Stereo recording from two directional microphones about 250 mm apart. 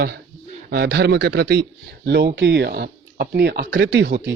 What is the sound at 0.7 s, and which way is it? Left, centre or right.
Speech, right.